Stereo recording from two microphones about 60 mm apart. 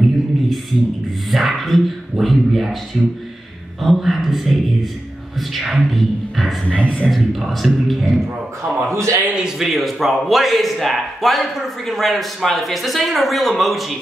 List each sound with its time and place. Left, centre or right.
1.3 s speech: centre
5.8 s speech: centre
6.6 s speech: left
7.1 s speech: centre
8.9 s a man's voice: right
9.4 s speech: centre